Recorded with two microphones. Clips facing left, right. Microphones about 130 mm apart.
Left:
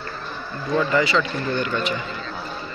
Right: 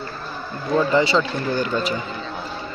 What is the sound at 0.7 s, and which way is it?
Speech, 30° right (ahead or behind).